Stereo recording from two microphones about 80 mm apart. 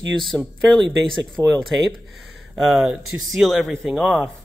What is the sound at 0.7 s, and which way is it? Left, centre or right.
Speech, centre.